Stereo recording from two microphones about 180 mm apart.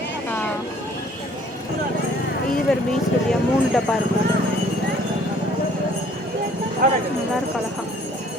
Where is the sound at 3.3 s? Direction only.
Centre (ahead or behind).